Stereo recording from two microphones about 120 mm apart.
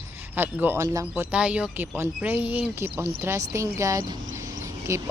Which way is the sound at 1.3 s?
10° right (ahead or behind).